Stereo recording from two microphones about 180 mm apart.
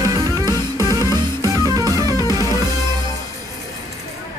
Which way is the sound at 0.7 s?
15° left (ahead or behind).